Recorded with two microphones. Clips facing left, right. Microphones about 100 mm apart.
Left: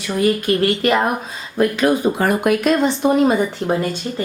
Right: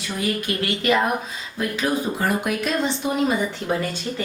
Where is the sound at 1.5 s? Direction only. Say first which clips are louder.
Left 8 dB; 60° left (ahead or behind).